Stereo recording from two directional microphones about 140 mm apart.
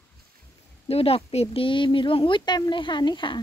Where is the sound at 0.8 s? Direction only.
45° left (ahead or behind).